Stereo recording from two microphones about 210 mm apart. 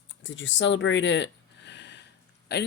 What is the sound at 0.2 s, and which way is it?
Speech, 60° left (ahead or behind).